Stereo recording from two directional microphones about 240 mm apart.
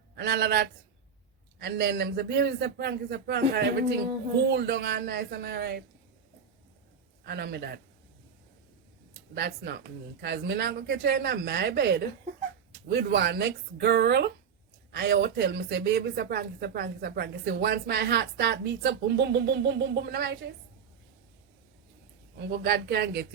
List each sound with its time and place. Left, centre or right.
0.2 s a woman's voice: right
7.3 s a woman's voice: right
9.3 s a woman's voice: right
22.4 s a woman's voice: right